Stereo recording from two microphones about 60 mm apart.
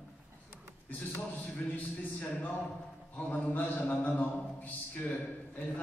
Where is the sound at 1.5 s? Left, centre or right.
Left.